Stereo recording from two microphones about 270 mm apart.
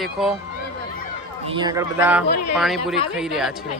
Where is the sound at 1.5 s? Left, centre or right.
Centre.